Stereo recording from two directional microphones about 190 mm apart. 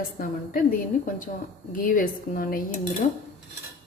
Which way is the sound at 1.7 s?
45° left (ahead or behind).